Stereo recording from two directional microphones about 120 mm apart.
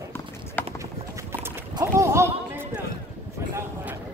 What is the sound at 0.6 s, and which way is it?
Clip-clop, 15° left (ahead or behind).